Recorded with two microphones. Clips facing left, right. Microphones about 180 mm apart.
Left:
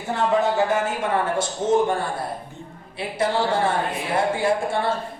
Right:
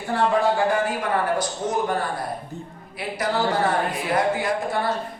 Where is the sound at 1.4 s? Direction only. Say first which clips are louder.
Left 4 dB; 25° left (ahead or behind).